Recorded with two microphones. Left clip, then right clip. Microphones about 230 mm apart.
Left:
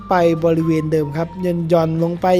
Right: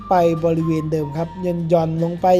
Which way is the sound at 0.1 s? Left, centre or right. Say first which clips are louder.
Left 1 dB; centre.